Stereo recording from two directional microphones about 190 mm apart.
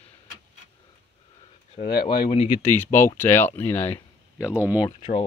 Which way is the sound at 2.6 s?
10° left (ahead or behind).